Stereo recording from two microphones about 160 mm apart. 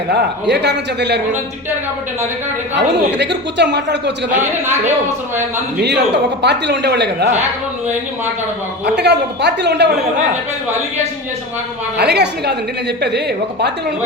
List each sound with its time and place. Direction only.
0.1 s a woman's voice: 90° right
2.7 s a woman's voice: 90° right
6.4 s a woman's voice: 90° right
9.0 s a woman's voice: 90° right
11.9 s a woman's voice: 90° right